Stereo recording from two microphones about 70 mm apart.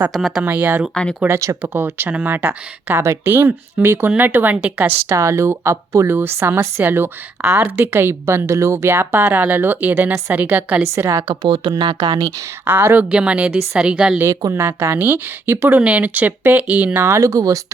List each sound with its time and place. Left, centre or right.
0.1 s speech: centre
0.4 s speech: right
1.3 s speech: right
1.7 s speech: right
5.0 s speech: right
6.1 s a woman's voice: right
10.9 s speech: right
11.4 s speech: right
12.6 s a woman's voice: right
13.0 s speech: centre
14.5 s a woman's voice: right
15.6 s speech: right
17.0 s speech: right